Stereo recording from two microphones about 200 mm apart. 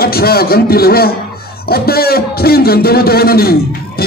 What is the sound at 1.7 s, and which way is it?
A man's voice, 50° left (ahead or behind).